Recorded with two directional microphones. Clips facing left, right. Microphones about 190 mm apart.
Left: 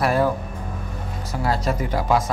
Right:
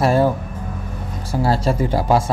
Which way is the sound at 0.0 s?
30° right (ahead or behind).